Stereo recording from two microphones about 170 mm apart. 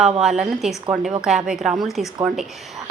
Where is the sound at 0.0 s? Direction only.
Centre (ahead or behind).